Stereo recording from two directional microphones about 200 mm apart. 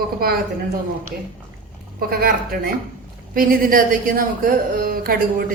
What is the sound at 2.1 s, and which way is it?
A woman's voice, 45° right (ahead or behind).